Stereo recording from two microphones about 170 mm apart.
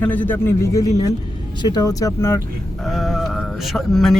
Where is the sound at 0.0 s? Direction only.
10° left (ahead or behind).